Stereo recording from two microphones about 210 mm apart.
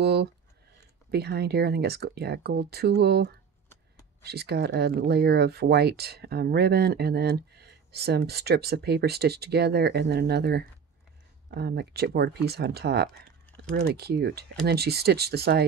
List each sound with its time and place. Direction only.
0.0 s speech: 50° right (ahead or behind)